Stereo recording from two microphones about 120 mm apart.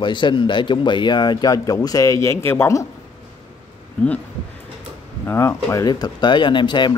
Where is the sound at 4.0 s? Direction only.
10° left (ahead or behind).